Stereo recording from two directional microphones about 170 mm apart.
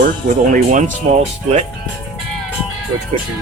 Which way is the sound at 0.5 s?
45° right (ahead or behind).